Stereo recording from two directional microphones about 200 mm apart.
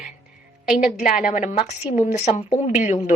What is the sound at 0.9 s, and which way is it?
A woman's voice, 40° left (ahead or behind).